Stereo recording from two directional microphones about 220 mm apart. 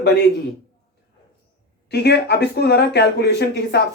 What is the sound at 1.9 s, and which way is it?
Speech, 50° left (ahead or behind).